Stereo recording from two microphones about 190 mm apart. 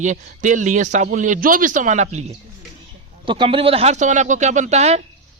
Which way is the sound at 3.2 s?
25° right (ahead or behind).